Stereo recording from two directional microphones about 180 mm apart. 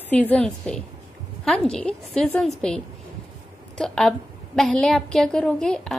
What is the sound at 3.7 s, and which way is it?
A woman's voice, 5° left (ahead or behind).